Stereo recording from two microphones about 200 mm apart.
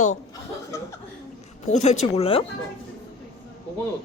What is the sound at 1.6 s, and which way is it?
Speech, 35° left (ahead or behind).